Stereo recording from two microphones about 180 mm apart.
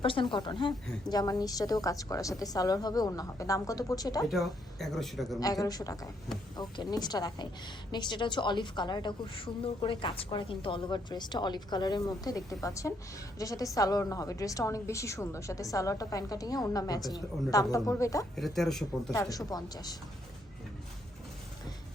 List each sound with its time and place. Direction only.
0.0 s a woman's voice: 30° left (ahead or behind)
4.3 s speech: centre (ahead or behind)
5.4 s a woman's voice: 20° left (ahead or behind)
18.3 s speech: centre (ahead or behind)
19.3 s a woman's voice: 20° left (ahead or behind)